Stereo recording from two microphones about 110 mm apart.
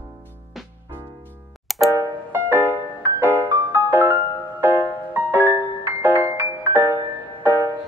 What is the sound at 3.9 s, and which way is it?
Music, 20° right (ahead or behind).